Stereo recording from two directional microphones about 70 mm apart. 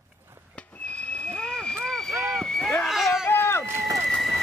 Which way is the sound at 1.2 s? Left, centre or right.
Centre.